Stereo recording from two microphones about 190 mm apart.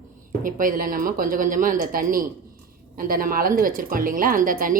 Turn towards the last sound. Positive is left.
turn(degrees=-45)  # may be behind; listen again after turning